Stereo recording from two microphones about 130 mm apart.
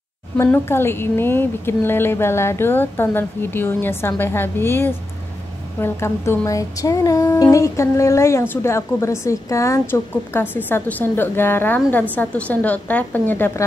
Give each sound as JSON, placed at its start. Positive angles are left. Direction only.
{"t": 0.4, "sound": "a woman's voice", "side_deg": 20}